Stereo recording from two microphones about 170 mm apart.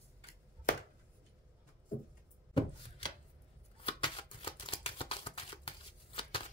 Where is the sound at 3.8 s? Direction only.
30° left (ahead or behind).